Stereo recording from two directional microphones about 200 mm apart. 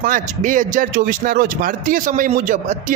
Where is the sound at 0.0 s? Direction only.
40° right (ahead or behind).